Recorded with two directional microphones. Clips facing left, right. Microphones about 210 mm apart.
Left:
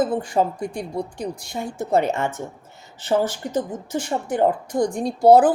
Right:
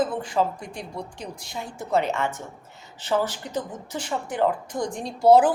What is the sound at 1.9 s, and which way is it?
A woman's voice, 50° left (ahead or behind).